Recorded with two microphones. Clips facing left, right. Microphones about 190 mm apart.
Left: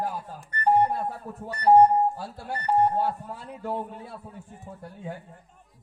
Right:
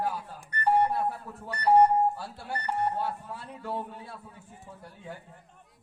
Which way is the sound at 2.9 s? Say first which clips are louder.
Left 5 dB; 45° left (ahead or behind).